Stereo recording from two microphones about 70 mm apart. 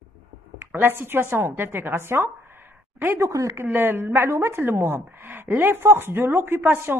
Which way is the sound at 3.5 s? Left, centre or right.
Right.